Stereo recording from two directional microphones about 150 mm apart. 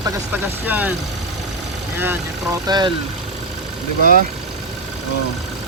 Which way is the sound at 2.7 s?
30° right (ahead or behind).